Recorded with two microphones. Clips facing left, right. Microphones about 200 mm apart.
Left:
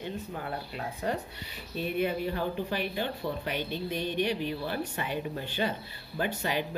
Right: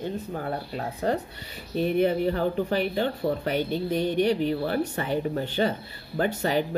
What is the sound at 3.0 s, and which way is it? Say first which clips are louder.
Speech: right 7 dB; 50° right (ahead or behind).